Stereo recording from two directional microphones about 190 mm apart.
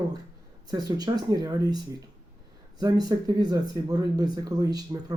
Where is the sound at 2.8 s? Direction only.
20° right (ahead or behind).